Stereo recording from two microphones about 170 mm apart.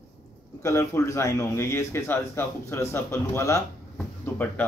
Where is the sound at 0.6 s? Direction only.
15° left (ahead or behind).